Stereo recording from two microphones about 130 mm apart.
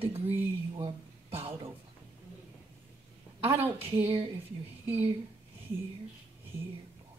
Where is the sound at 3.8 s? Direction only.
45° right (ahead or behind).